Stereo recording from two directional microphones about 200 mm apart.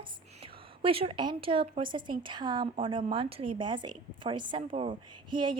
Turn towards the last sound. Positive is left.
turn(degrees=-25)  # may be behind; listen again after turning